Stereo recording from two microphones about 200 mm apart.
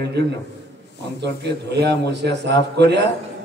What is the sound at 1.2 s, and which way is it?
A man's voice, 55° right (ahead or behind).